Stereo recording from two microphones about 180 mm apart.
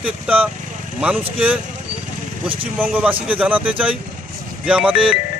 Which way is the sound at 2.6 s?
10° right (ahead or behind).